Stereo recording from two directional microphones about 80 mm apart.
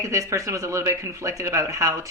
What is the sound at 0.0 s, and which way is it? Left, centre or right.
Speech, right.